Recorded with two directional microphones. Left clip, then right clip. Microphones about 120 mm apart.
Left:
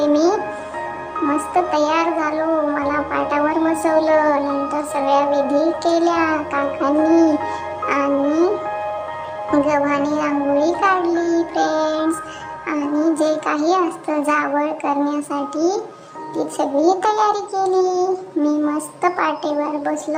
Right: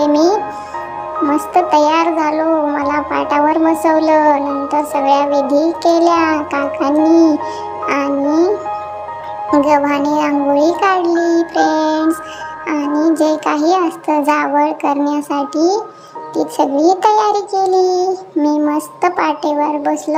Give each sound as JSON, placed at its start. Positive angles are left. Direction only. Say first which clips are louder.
{"t": 0.0, "sound": "music", "louder": "right 4 dB", "side_deg": -25}
{"t": 1.3, "sound": "a child's voice", "louder": "right 6 dB", "side_deg": -25}
{"t": 7.9, "sound": "music", "louder": "right 2 dB", "side_deg": -25}
{"t": 9.5, "sound": "a child's voice", "louder": "right 5 dB", "side_deg": -25}